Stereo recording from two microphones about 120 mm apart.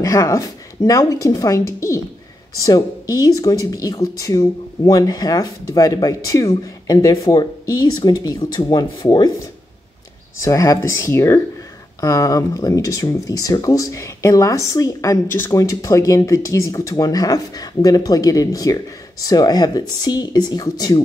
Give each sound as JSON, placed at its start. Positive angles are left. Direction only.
{"t": 0.0, "sound": "speech", "side_deg": 25}
{"t": 10.4, "sound": "speech", "side_deg": 25}